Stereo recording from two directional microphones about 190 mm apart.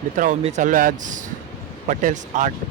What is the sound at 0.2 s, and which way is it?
Speech, 40° right (ahead or behind).